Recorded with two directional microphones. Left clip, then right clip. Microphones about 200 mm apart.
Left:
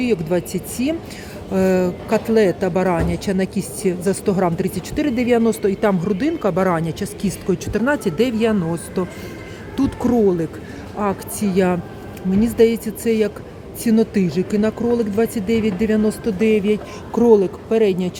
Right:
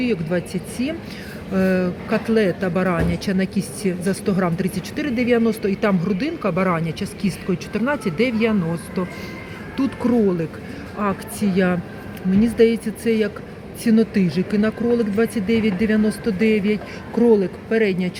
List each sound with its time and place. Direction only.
0.0 s speech: 20° left (ahead or behind)